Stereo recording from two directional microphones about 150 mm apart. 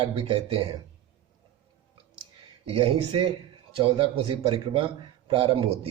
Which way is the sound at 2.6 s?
40° right (ahead or behind).